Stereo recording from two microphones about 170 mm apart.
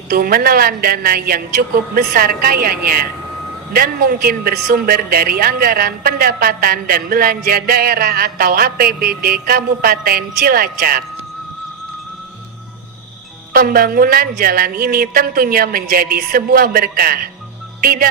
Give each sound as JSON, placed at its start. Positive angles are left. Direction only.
{"t": 0.1, "sound": "speech", "side_deg": -60}
{"t": 13.5, "sound": "speech", "side_deg": -60}